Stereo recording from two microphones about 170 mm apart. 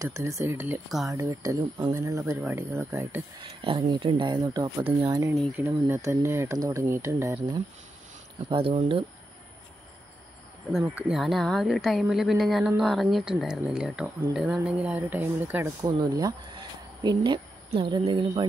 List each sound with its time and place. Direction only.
0.0 s speech: 20° right (ahead or behind)
0.8 s speech: centre (ahead or behind)
1.1 s speech: 20° right (ahead or behind)
3.6 s speech: 30° right (ahead or behind)
8.5 s speech: 35° right (ahead or behind)
10.7 s speech: 5° right (ahead or behind)
15.8 s speech: 25° right (ahead or behind)